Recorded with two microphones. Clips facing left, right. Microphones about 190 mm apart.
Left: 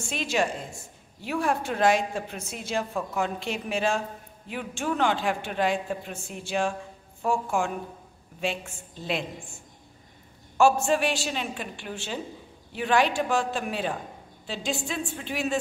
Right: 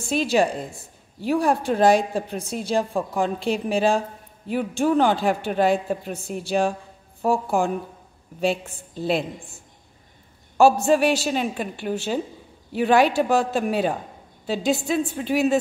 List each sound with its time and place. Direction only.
0.0 s speech: 35° right (ahead or behind)
10.6 s speech: 35° right (ahead or behind)